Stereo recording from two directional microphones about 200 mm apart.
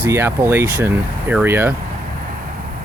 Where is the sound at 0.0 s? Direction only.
10° right (ahead or behind).